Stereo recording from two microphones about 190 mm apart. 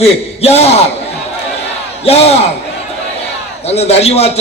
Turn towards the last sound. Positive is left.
turn(degrees=35)  # may be behind; listen again after turning